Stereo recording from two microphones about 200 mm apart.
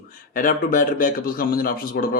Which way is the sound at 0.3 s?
45° left (ahead or behind).